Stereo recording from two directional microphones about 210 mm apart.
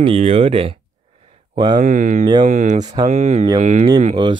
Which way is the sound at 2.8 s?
20° right (ahead or behind).